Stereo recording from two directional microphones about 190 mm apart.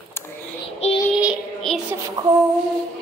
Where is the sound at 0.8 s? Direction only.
35° left (ahead or behind).